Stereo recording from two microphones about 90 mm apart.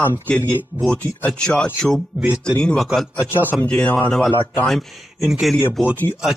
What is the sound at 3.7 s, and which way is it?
Speech, 15° left (ahead or behind).